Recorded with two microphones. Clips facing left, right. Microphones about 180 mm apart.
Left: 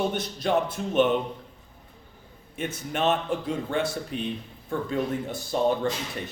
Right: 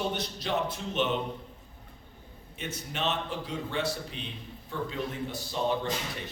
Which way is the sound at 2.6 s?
50° left (ahead or behind).